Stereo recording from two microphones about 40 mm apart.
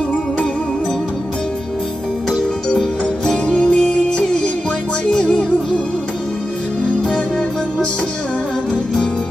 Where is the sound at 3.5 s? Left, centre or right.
Left.